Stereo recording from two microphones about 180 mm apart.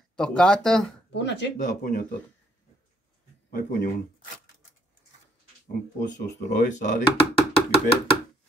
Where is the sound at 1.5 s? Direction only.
45° left (ahead or behind).